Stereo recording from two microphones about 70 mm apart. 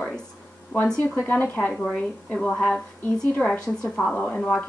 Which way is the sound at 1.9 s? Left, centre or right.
Centre.